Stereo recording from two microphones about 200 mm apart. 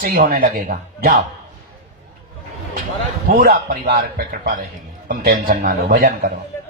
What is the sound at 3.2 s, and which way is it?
Speech, 50° right (ahead or behind).